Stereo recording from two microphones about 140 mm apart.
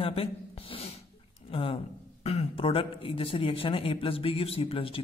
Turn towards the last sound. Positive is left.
turn(degrees=40)  # may be behind; listen again after turning